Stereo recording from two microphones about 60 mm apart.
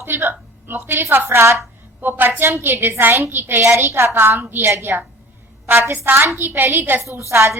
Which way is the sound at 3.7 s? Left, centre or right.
Right.